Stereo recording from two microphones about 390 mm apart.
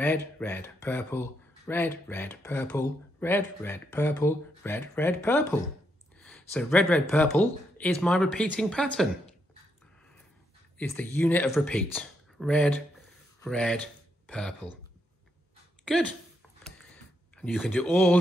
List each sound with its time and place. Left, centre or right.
0.0 s speech: centre
10.8 s speech: centre
15.8 s speech: centre
16.6 s a sound: centre